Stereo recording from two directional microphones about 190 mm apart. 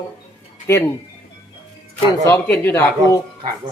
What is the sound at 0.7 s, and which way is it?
Speech, 15° left (ahead or behind).